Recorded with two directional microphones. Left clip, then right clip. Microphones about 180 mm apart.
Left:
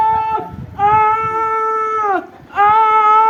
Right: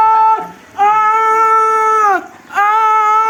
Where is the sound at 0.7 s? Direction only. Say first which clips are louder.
Right 2 dB; 25° right (ahead or behind).